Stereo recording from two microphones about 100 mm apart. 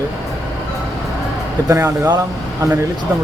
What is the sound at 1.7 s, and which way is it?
Speech, 35° right (ahead or behind).